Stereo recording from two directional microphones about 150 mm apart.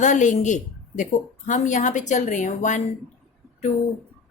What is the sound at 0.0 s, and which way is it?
A woman's voice, 55° left (ahead or behind).